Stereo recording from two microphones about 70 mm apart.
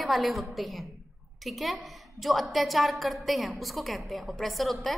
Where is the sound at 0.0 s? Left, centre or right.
Centre.